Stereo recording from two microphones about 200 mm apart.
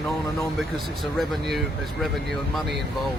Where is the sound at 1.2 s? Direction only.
Centre (ahead or behind).